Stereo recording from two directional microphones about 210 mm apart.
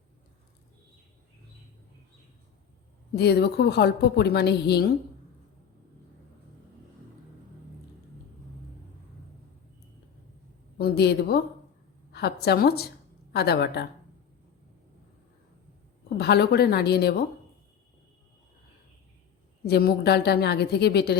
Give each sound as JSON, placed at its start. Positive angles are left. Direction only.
{"t": 3.2, "sound": "a woman's voice", "side_deg": 50}
{"t": 10.8, "sound": "a woman's voice", "side_deg": 50}
{"t": 16.0, "sound": "a woman's voice", "side_deg": 50}
{"t": 19.6, "sound": "a woman's voice", "side_deg": 50}